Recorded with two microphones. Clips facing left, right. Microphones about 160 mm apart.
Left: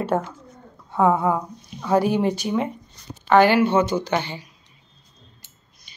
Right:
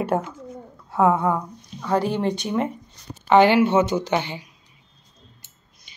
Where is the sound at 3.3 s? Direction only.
20° right (ahead or behind).